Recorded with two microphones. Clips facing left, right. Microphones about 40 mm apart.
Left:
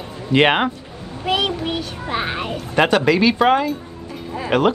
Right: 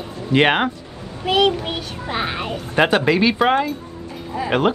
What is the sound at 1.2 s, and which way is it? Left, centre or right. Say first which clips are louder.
Child singing: right 3 dB; centre.